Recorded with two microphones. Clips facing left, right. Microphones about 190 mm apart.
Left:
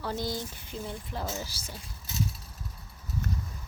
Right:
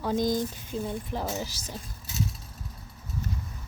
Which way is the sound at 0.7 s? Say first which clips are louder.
Right 6 dB; 15° right (ahead or behind).